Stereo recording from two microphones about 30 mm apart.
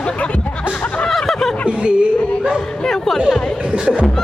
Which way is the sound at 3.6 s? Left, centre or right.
Right.